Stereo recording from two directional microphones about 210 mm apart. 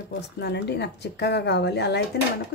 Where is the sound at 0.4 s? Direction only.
50° left (ahead or behind).